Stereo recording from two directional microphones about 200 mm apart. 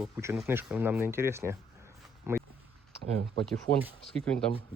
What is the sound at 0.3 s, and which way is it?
Speech, 10° right (ahead or behind).